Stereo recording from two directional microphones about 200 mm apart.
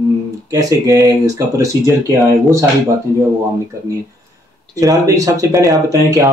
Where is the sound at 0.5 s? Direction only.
15° right (ahead or behind).